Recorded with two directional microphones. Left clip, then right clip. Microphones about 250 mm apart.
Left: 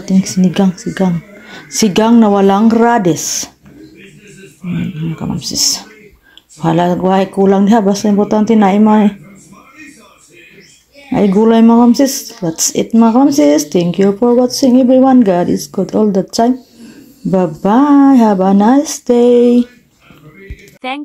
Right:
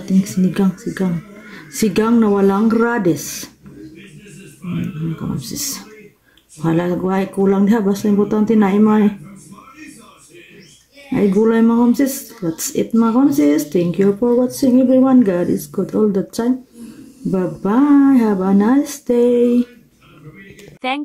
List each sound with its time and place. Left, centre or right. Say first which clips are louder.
0.0 s speech: left 4 dB; centre
5.4 s speech: left 11 dB; centre
11.1 s speech: left 5 dB; centre
20.8 s speech: even; centre